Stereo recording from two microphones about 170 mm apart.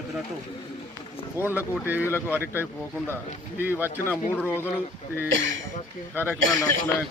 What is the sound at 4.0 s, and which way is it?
Speech, 10° left (ahead or behind).